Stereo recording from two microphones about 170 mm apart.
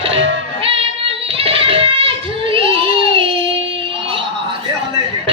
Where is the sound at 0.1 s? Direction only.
35° right (ahead or behind).